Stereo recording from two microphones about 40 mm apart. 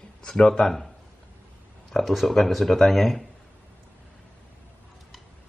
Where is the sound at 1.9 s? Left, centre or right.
Centre.